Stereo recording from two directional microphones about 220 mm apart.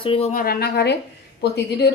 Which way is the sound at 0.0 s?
25° left (ahead or behind).